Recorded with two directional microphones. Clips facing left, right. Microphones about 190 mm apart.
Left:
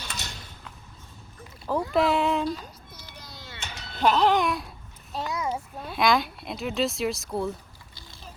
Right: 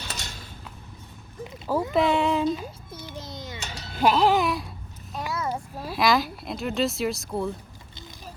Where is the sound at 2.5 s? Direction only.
25° right (ahead or behind); by 4.7 s centre (ahead or behind).